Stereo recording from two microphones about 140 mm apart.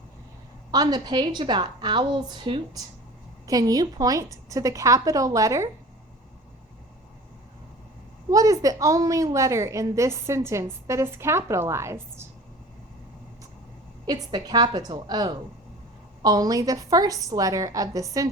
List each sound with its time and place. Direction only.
0.7 s a woman's voice: 30° right (ahead or behind)
8.3 s a woman's voice: 25° right (ahead or behind)
14.1 s a woman's voice: 30° right (ahead or behind)